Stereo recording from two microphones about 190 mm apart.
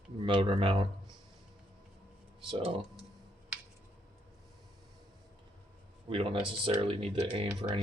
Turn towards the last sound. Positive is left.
turn(degrees=-30)  # may be behind; listen again after turning